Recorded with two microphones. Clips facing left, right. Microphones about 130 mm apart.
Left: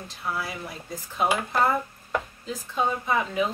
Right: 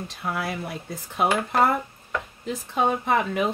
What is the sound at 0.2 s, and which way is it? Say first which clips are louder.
Speech: right 2 dB; 60° right (ahead or behind).